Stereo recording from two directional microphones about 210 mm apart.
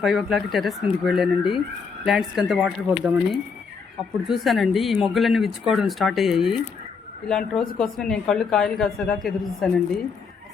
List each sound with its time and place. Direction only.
0.0 s speech: centre (ahead or behind)
4.3 s speech: centre (ahead or behind)